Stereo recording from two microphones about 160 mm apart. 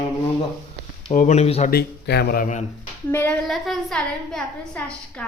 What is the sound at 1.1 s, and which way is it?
Speech, 45° left (ahead or behind).